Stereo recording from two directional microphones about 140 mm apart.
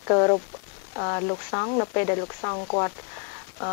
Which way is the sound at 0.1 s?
25° left (ahead or behind).